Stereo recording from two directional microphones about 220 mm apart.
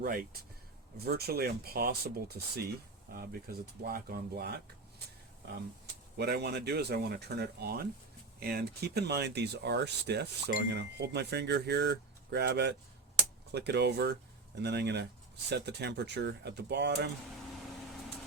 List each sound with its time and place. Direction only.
0.0 s speech: 40° right (ahead or behind)
5.8 s speech: 50° right (ahead or behind)